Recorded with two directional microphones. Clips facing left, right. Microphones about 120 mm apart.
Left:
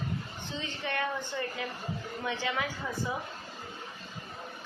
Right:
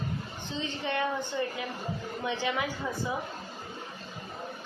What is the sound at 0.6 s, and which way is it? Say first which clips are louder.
A woman's voice: right 3 dB; 25° right (ahead or behind).